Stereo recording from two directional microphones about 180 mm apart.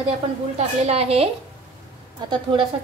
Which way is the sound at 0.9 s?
35° right (ahead or behind).